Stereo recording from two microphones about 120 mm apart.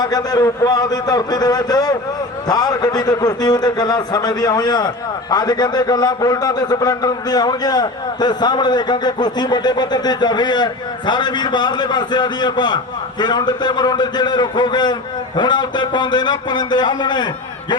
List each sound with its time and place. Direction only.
0.0 s a man's voice: 30° left (ahead or behind)